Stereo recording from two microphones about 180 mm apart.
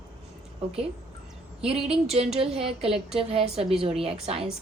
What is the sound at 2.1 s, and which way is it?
A woman's voice, 35° right (ahead or behind).